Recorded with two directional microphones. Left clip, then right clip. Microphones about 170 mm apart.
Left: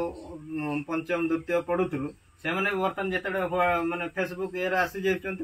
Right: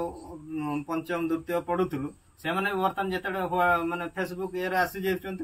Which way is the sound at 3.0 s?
25° right (ahead or behind).